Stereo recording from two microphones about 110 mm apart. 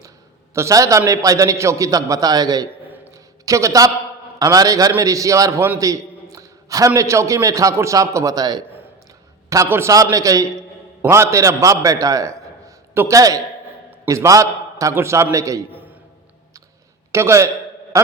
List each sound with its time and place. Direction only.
0.5 s a man's voice: 30° right (ahead or behind)
5.8 s a man's voice: 30° right (ahead or behind)
9.6 s a man's voice: 20° right (ahead or behind)
9.9 s a man's voice: 30° right (ahead or behind)
17.1 s a man's voice: 25° right (ahead or behind)
17.9 s a sound: 30° right (ahead or behind)